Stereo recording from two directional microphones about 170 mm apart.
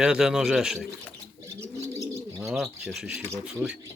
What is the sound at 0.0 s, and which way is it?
Speech, 5° right (ahead or behind).